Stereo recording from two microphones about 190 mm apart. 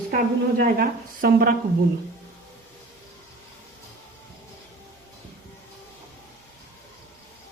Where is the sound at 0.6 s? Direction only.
50° right (ahead or behind).